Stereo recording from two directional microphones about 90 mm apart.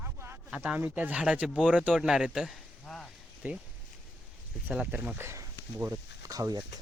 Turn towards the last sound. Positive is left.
turn(degrees=-45)  # may be behind; listen again after turning